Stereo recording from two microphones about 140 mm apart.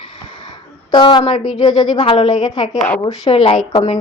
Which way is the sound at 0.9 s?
35° left (ahead or behind).